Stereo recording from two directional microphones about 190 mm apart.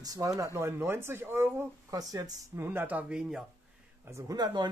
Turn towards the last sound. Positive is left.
turn(degrees=-20)  # may be behind; listen again after turning